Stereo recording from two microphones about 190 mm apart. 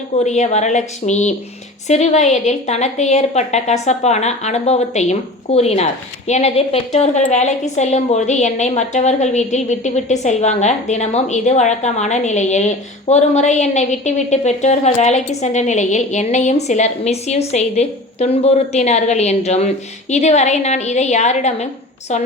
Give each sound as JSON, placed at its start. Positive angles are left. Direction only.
{"t": 0.3, "sound": "a woman's voice", "side_deg": 35}